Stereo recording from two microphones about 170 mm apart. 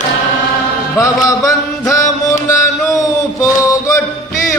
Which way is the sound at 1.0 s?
20° left (ahead or behind).